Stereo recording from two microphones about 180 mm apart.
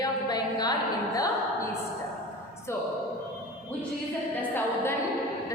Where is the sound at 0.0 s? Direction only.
20° left (ahead or behind).